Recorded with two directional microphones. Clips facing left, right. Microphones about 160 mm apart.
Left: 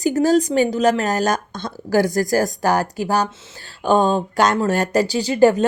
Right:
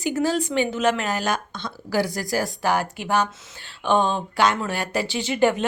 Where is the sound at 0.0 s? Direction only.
40° left (ahead or behind).